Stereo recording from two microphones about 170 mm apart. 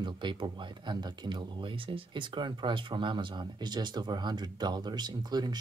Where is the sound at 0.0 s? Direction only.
25° right (ahead or behind).